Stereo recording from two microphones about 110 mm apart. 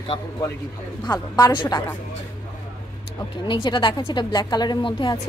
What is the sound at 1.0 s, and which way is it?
Speech, 40° left (ahead or behind).